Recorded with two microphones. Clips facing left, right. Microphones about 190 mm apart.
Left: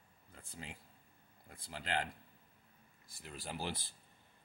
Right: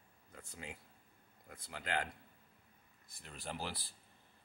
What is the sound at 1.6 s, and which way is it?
Speech, 30° left (ahead or behind).